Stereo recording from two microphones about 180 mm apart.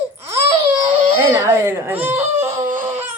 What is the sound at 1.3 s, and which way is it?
Speech, 15° right (ahead or behind).